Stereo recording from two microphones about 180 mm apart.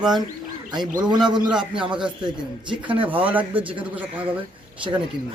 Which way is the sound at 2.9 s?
30° right (ahead or behind).